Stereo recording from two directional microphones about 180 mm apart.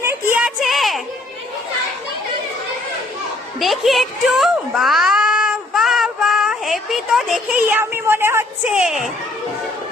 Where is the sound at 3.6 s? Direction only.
Centre (ahead or behind).